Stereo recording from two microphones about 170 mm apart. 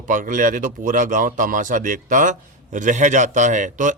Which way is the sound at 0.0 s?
50° right (ahead or behind).